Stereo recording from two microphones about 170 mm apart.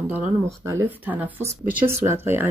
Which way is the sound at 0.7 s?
15° right (ahead or behind).